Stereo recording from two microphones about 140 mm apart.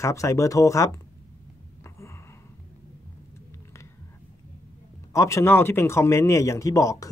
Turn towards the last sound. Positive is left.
turn(degrees=25)  # may be behind; listen again after turning